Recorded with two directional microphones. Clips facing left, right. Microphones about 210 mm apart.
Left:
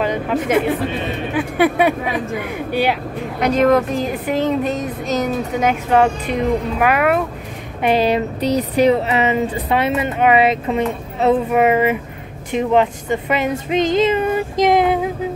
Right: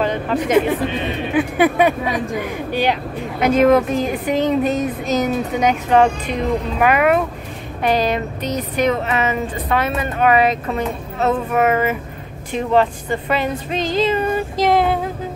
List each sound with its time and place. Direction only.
0.0 s speech: 10° left (ahead or behind)
3.3 s speech: 5° right (ahead or behind)
7.8 s a woman's voice: 25° left (ahead or behind)